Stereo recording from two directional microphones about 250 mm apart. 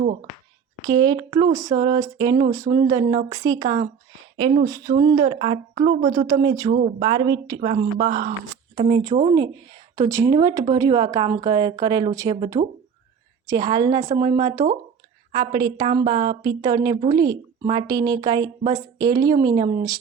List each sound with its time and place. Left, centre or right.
0.0 s speech: right
0.9 s a woman's voice: centre